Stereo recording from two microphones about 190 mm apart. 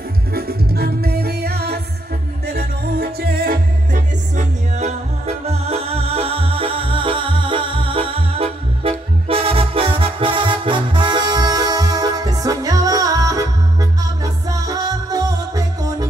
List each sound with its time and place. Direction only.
0.3 s music: 55° right (ahead or behind); by 16.1 s 20° right (ahead or behind)